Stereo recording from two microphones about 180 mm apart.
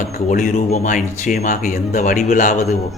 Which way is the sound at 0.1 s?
50° left (ahead or behind).